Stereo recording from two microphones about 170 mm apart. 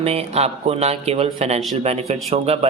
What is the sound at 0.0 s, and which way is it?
A man's voice, 35° right (ahead or behind).